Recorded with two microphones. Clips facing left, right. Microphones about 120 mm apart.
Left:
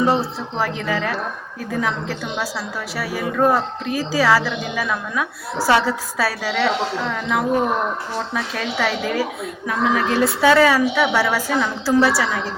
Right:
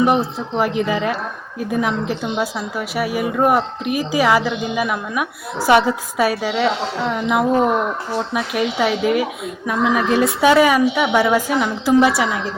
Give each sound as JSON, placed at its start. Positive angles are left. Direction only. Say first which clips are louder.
{"t": 0.0, "sound": "a woman's voice", "louder": "right 2 dB", "side_deg": -20}